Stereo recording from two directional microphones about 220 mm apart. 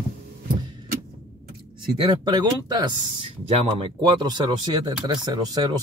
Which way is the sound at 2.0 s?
20° right (ahead or behind).